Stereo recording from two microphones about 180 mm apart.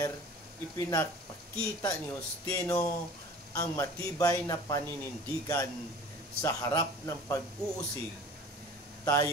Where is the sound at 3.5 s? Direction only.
20° left (ahead or behind).